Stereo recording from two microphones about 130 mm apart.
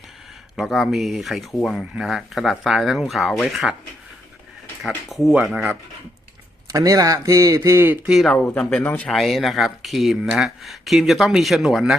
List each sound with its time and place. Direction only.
0.5 s speech: centre (ahead or behind)
5.0 s speech: centre (ahead or behind)
6.7 s speech: 25° right (ahead or behind)
8.1 s speech: centre (ahead or behind)
8.4 s speech: 10° left (ahead or behind)
9.0 s speech: centre (ahead or behind)